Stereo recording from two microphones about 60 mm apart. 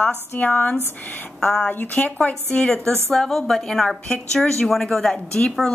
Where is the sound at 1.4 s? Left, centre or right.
Centre.